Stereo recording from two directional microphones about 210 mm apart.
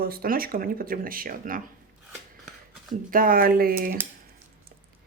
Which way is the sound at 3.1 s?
45° right (ahead or behind).